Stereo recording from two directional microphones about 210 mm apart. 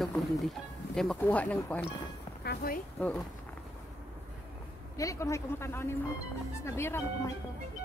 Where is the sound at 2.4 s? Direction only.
45° left (ahead or behind).